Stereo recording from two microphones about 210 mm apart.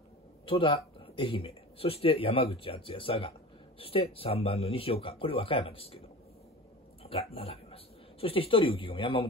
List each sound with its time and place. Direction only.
0.5 s speech: 25° left (ahead or behind)
7.0 s speech: 25° left (ahead or behind)